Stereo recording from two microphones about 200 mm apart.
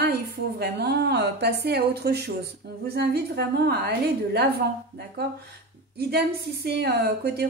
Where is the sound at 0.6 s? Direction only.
55° right (ahead or behind).